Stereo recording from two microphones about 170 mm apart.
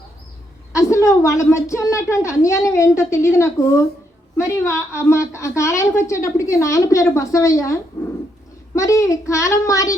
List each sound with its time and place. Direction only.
0.7 s a woman's voice: 20° left (ahead or behind)